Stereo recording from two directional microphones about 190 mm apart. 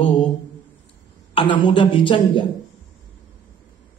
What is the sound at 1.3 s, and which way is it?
A woman's voice, 25° left (ahead or behind).